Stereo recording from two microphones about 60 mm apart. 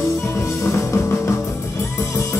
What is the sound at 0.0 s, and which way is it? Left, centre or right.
Music, left.